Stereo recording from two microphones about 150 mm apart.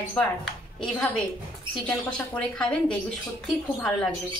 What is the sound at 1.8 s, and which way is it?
Speech, 5° left (ahead or behind).